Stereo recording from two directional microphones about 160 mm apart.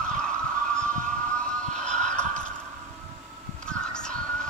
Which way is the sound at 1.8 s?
45° right (ahead or behind).